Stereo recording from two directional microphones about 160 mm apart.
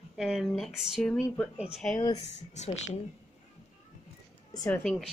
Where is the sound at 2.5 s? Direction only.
45° left (ahead or behind).